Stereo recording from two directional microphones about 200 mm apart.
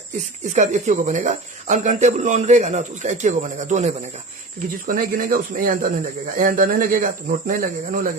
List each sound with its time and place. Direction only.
0.4 s speech: 35° right (ahead or behind)